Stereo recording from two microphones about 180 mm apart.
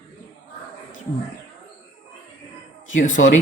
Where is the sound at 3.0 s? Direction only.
45° left (ahead or behind).